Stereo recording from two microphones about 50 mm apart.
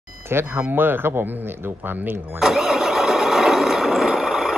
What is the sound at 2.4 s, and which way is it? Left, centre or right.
Engine starting, centre.